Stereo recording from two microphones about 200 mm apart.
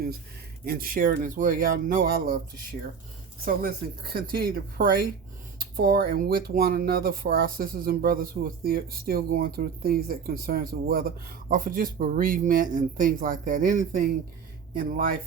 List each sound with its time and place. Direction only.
0.6 s speech: 50° right (ahead or behind)
3.4 s speech: 50° right (ahead or behind)